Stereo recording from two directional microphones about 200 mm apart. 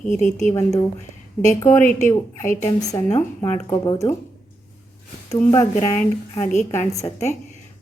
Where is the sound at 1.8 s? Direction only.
40° left (ahead or behind).